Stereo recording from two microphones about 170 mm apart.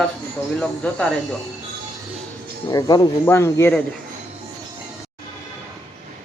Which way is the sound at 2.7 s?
20° left (ahead or behind).